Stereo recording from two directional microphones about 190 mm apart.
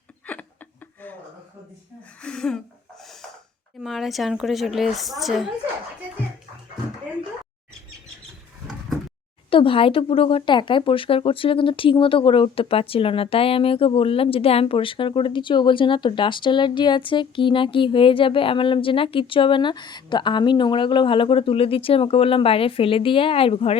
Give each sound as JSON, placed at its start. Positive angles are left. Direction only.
{"t": 2.2, "sound": "a woman's voice", "side_deg": 5}
{"t": 3.8, "sound": "a woman's voice", "side_deg": 0}
{"t": 9.5, "sound": "speech", "side_deg": 30}